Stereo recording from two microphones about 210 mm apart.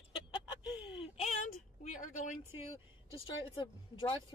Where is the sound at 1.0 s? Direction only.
30° left (ahead or behind).